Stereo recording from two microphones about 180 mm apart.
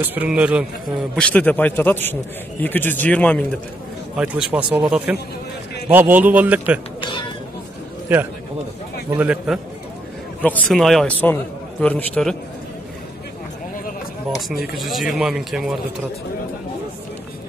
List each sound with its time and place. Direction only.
0.0 s a man's voice: 10° right (ahead or behind)
1.1 s a man's voice: 5° left (ahead or behind)
4.2 s a man's voice: 5° right (ahead or behind)
7.0 s cat: 25° left (ahead or behind)
8.1 s a man's voice: 10° right (ahead or behind)
10.4 s a man's voice: 5° left (ahead or behind)
14.5 s speech: 60° left (ahead or behind)
14.9 s speech: centre (ahead or behind)